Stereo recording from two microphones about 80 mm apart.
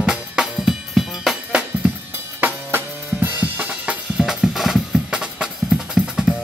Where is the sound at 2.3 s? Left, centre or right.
Right.